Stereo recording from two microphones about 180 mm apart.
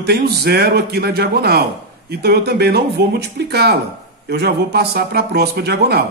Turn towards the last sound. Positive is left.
turn(degrees=-65)  # may be behind; listen again after turning